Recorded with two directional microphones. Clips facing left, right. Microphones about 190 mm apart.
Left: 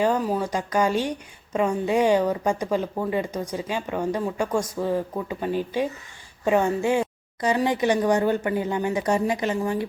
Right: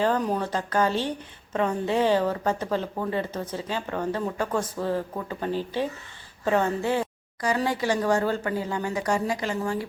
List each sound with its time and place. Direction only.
0.0 s a woman's voice: 10° left (ahead or behind)